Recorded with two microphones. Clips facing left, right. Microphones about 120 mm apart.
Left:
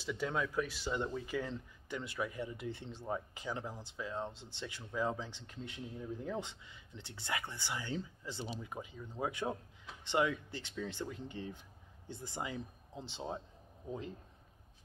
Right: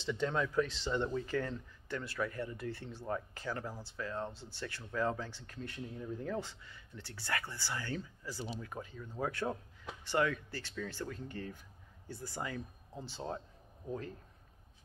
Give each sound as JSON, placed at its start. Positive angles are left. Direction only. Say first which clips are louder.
{"t": 0.0, "sound": "speech", "louder": "right 2 dB", "side_deg": 10}